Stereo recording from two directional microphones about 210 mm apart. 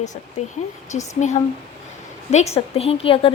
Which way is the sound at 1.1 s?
35° left (ahead or behind).